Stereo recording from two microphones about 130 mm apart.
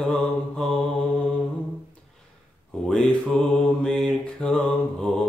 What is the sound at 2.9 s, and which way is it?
Mantra, 5° left (ahead or behind).